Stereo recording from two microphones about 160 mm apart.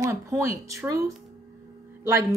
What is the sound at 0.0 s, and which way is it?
A woman's voice, 20° right (ahead or behind).